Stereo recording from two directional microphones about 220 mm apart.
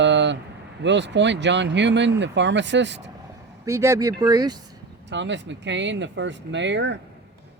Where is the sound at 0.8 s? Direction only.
55° right (ahead or behind).